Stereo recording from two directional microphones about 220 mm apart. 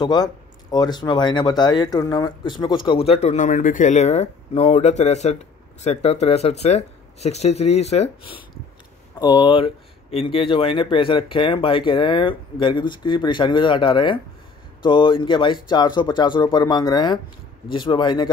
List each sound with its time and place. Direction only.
0.0 s speech: 20° left (ahead or behind)